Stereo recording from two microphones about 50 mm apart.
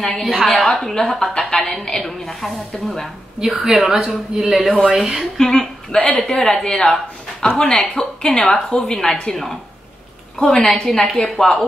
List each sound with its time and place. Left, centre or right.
0.0 s a woman's voice: centre
3.4 s a woman's voice: centre
5.4 s a woman's voice: centre